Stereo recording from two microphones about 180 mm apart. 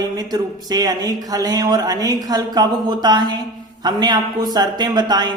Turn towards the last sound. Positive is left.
turn(degrees=-25)  # may be behind; listen again after turning